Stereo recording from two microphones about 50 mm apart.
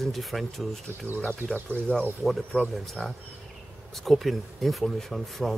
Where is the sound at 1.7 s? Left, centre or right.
Left.